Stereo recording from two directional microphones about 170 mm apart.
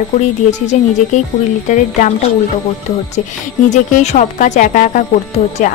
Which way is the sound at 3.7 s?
45° left (ahead or behind).